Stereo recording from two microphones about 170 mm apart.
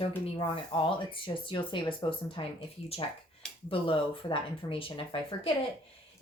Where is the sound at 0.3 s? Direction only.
30° left (ahead or behind).